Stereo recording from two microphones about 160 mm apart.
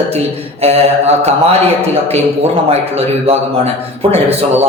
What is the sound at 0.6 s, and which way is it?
A man's voice, 40° right (ahead or behind).